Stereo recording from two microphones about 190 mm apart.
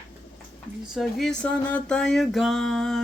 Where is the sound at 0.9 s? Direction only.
Centre (ahead or behind).